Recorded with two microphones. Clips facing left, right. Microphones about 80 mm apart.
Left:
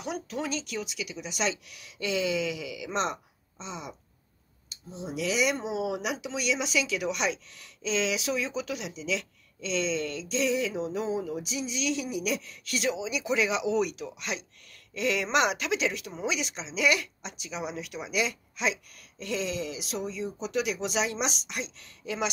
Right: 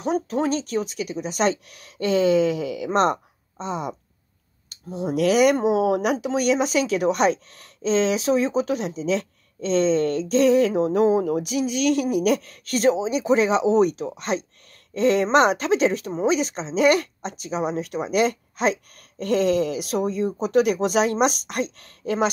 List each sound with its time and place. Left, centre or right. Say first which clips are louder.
0.0 s speech: right 10 dB; right